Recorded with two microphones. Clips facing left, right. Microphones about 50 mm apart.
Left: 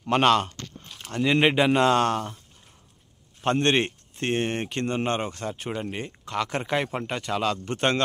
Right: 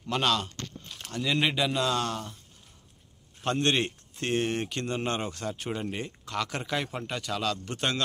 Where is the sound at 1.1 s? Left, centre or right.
Left.